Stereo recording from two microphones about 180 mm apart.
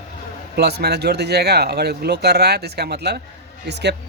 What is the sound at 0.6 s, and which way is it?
Speech, 65° right (ahead or behind).